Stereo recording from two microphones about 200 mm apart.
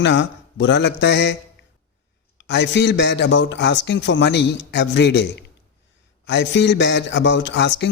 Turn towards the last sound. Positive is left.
turn(degrees=60)  # may be behind; listen again after turning